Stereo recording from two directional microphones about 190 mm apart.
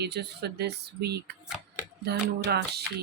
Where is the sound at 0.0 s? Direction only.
60° right (ahead or behind).